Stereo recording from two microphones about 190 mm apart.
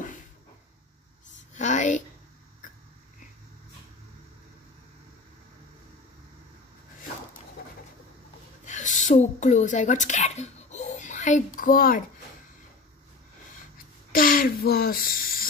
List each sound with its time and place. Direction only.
1.5 s a sound: 40° left (ahead or behind)
8.6 s a woman's voice: 40° left (ahead or behind)
14.1 s speech: 50° left (ahead or behind)